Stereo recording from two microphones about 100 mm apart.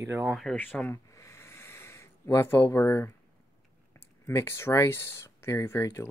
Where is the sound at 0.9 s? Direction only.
30° left (ahead or behind).